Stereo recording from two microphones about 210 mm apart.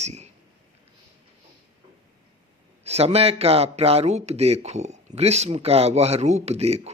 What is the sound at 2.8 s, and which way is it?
A man's voice, 30° right (ahead or behind).